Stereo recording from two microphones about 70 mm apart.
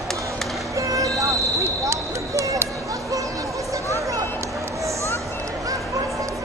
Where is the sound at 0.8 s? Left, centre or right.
Right.